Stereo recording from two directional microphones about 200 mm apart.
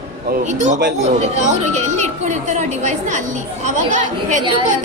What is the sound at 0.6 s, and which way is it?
Speech, 35° right (ahead or behind).